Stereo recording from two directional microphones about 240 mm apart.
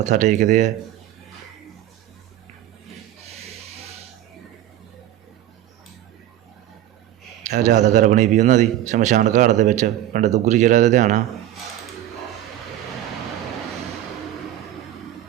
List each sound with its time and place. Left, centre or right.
0.0 s speech: right
7.4 s speech: right